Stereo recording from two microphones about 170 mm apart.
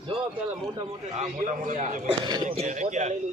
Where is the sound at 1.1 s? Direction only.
45° right (ahead or behind).